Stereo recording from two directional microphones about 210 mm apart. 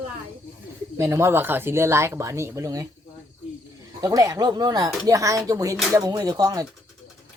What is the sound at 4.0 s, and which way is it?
Speech, 15° right (ahead or behind).